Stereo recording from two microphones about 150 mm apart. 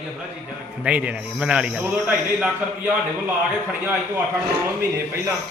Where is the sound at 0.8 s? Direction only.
10° right (ahead or behind).